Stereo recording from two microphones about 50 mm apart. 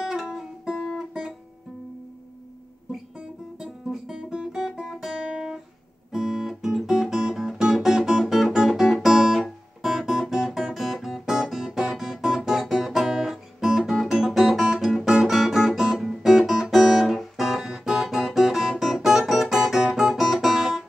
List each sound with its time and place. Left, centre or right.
0.0 s music: centre
3.5 s guitar: centre
14.6 s guitar: centre